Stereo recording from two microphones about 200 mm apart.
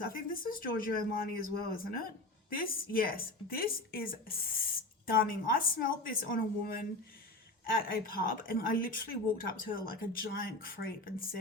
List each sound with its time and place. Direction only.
0.0 s a woman's voice: 45° left (ahead or behind)